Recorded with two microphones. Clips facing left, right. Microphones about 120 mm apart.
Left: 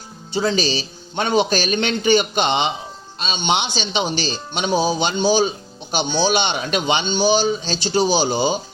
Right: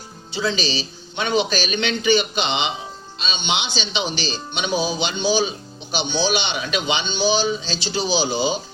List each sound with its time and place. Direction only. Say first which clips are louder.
0.3 s speech: left 4 dB; 45° left (ahead or behind)